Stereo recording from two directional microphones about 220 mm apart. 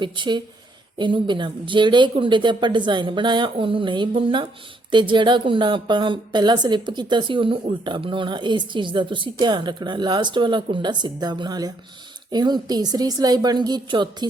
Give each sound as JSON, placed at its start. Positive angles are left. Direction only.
{"t": 0.0, "sound": "a woman's voice", "side_deg": -20}